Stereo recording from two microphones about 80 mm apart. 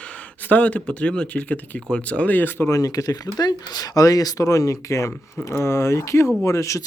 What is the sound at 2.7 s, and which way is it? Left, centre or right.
Speech, left.